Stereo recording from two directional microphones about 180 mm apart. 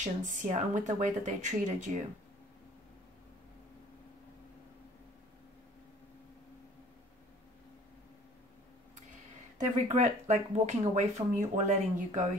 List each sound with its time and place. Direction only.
0.0 s speech: 40° right (ahead or behind)
9.6 s speech: 40° right (ahead or behind)